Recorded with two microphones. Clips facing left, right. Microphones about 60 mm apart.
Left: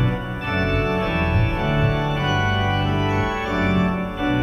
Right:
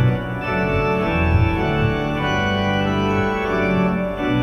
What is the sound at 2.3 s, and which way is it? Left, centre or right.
Organ, right.